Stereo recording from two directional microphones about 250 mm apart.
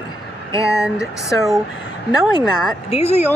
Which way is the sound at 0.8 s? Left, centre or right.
Centre.